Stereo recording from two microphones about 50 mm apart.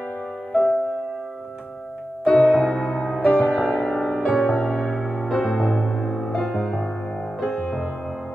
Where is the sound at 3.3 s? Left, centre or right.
Left.